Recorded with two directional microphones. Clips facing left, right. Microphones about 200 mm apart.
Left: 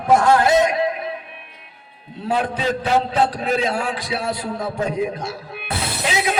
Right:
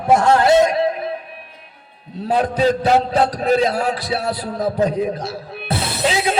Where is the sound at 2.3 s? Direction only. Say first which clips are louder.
Right 5 dB; 35° right (ahead or behind).